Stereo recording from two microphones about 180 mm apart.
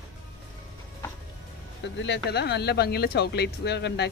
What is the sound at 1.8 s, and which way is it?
Speech, 75° left (ahead or behind).